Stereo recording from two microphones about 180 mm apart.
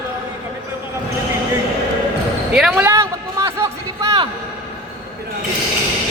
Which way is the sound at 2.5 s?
5° right (ahead or behind).